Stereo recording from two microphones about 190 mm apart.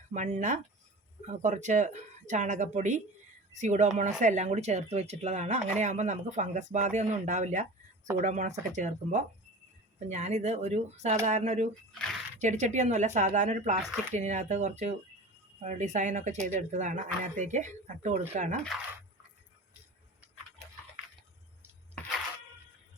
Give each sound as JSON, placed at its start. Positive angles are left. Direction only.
{"t": 0.1, "sound": "speech", "side_deg": -40}
{"t": 11.9, "sound": "speech", "side_deg": 5}
{"t": 12.4, "sound": "speech", "side_deg": -40}